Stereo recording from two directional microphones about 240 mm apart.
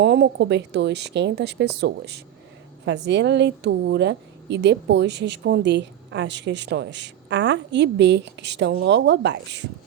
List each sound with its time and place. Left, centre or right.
0.0 s a woman's voice: right